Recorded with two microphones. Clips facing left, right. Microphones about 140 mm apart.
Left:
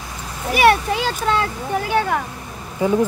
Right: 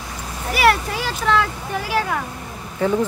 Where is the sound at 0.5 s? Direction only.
20° left (ahead or behind).